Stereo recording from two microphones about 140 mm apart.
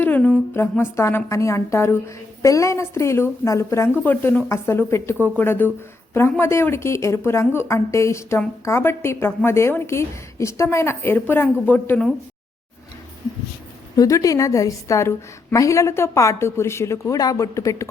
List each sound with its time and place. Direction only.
0.0 s a woman's voice: 10° left (ahead or behind)
13.9 s a woman's voice: 25° left (ahead or behind)